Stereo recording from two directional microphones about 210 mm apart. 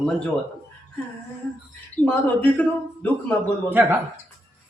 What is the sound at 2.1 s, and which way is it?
A man's voice, 10° left (ahead or behind).